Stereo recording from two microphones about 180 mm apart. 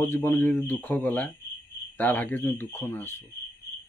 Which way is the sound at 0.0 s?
10° left (ahead or behind).